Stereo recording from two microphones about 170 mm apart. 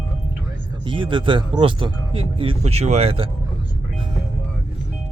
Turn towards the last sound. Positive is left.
turn(degrees=-35)  # may be behind; listen again after turning